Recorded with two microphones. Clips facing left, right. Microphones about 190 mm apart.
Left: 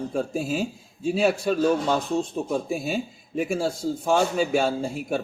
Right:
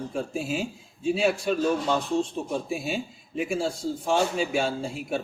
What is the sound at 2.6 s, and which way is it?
A man's voice, 40° left (ahead or behind).